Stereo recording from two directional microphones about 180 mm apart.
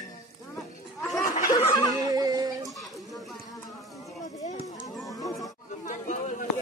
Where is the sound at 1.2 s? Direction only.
50° left (ahead or behind).